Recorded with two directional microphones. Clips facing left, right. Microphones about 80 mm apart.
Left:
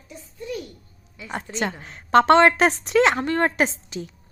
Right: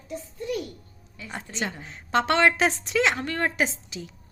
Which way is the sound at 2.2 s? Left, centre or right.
Left.